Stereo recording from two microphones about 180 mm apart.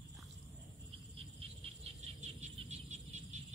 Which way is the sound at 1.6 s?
35° right (ahead or behind).